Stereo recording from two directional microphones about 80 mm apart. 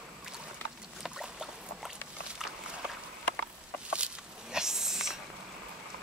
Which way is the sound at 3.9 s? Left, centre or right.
Centre.